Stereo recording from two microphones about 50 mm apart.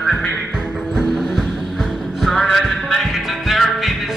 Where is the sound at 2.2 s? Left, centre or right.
Centre.